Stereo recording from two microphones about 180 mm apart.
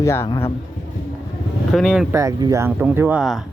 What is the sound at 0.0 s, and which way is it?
Speech, 15° left (ahead or behind).